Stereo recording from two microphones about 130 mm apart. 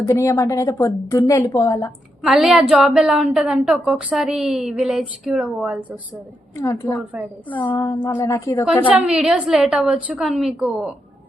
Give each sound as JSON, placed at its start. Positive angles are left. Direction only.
{"t": 0.1, "sound": "a woman's voice", "side_deg": 20}
{"t": 2.2, "sound": "a woman's voice", "side_deg": -5}
{"t": 6.6, "sound": "a woman's voice", "side_deg": 20}
{"t": 8.0, "sound": "a woman's voice", "side_deg": 15}
{"t": 8.9, "sound": "a woman's voice", "side_deg": -5}